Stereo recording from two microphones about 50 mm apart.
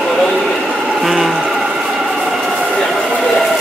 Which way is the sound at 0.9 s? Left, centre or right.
Centre.